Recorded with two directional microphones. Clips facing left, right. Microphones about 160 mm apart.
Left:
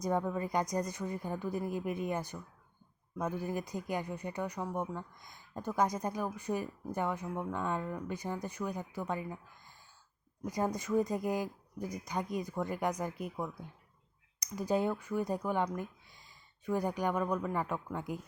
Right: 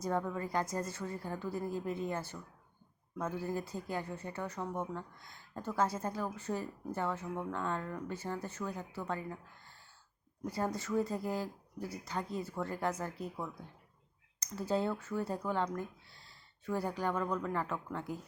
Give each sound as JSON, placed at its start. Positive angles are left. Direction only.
{"t": 0.0, "sound": "speech", "side_deg": 15}